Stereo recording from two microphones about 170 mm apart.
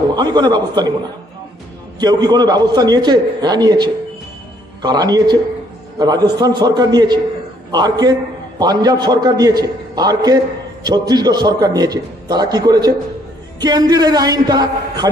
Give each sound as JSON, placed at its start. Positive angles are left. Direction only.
{"t": 0.2, "sound": "a man's voice", "side_deg": -25}
{"t": 2.0, "sound": "a man's voice", "side_deg": -25}